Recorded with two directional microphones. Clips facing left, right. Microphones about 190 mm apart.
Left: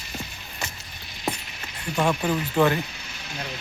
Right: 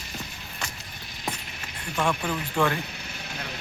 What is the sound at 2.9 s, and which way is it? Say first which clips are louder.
Vehicle: right 2 dB; 55° right (ahead or behind).